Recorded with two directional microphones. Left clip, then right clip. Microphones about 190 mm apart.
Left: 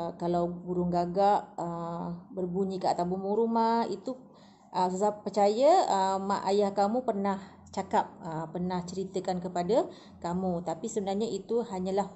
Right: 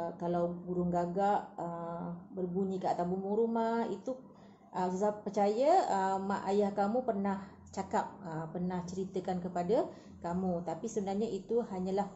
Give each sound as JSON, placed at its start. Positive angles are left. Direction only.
{"t": 0.0, "sound": "a woman's voice", "side_deg": 35}
{"t": 5.0, "sound": "a woman's voice", "side_deg": 35}